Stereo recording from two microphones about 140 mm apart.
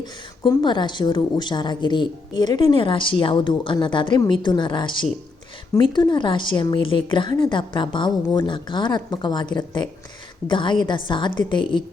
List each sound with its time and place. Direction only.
0.0 s a woman's voice: 35° left (ahead or behind)